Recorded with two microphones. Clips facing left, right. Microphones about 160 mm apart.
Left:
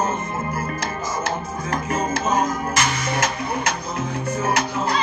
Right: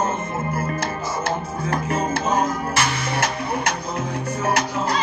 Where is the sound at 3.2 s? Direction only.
60° right (ahead or behind).